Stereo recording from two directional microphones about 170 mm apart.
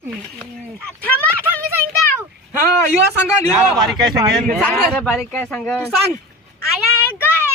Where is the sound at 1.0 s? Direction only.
10° left (ahead or behind).